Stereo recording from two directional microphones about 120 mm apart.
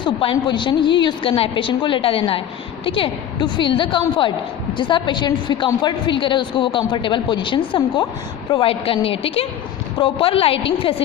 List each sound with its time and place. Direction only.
0.0 s a woman's voice: 45° left (ahead or behind)